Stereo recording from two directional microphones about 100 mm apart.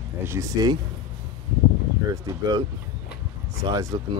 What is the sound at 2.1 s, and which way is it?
Speech, 35° right (ahead or behind).